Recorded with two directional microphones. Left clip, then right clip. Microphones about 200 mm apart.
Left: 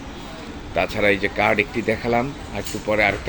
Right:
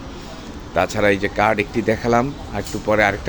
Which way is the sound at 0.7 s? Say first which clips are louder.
Right 2 dB; 15° right (ahead or behind).